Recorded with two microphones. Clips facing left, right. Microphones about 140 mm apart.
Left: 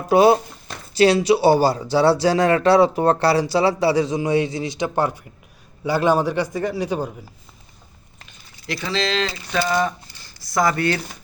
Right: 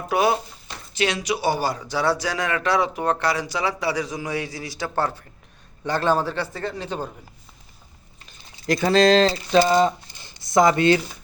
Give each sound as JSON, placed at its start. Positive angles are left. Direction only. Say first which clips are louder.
{"t": 0.1, "sound": "a man's voice", "louder": "left 7 dB", "side_deg": 30}
{"t": 8.6, "sound": "speech", "louder": "right 8 dB", "side_deg": -45}